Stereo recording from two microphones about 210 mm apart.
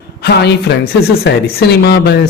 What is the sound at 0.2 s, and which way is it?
A woman's voice, 50° left (ahead or behind).